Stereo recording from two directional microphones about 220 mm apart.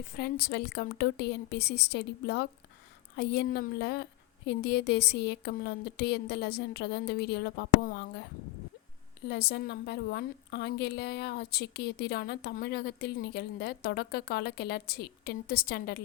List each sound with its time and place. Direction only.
0.2 s a woman's voice: 45° left (ahead or behind)
9.2 s a woman's voice: 50° left (ahead or behind)